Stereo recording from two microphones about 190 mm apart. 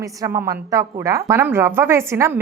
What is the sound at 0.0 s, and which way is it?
A woman's voice, 15° right (ahead or behind).